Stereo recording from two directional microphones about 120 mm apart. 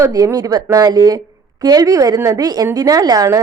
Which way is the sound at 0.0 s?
25° right (ahead or behind).